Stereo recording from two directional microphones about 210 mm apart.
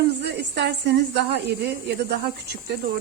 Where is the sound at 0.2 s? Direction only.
50° right (ahead or behind).